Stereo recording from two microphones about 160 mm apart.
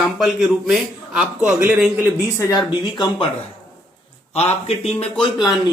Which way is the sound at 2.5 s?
25° left (ahead or behind).